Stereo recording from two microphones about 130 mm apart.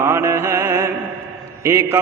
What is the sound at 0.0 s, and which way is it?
Mantra, 15° right (ahead or behind).